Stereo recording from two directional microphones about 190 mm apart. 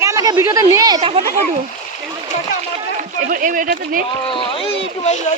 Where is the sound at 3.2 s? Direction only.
45° right (ahead or behind).